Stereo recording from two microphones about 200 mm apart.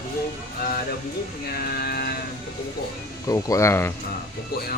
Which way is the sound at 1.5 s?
50° left (ahead or behind).